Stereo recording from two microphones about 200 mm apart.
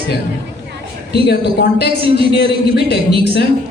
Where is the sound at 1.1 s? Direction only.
55° left (ahead or behind).